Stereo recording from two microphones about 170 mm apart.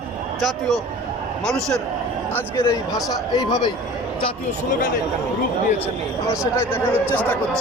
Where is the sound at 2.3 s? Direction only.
15° left (ahead or behind).